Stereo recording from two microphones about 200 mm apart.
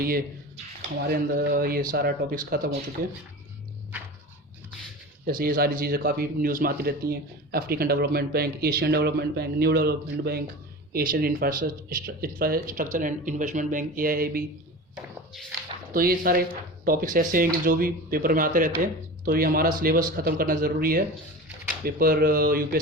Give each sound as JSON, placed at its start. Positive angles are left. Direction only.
{"t": 1.0, "sound": "a man's voice", "side_deg": -50}
{"t": 5.2, "sound": "a man's voice", "side_deg": -45}
{"t": 15.9, "sound": "a man's voice", "side_deg": -45}